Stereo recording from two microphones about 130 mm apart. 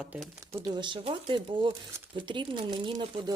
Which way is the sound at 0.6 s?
35° right (ahead or behind).